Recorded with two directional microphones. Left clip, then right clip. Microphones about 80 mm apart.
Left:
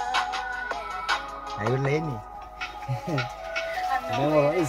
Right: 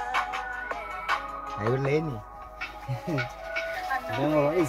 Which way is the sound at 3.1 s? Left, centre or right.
Left.